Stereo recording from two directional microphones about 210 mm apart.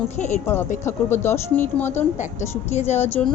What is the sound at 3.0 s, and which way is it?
Speech, 10° left (ahead or behind).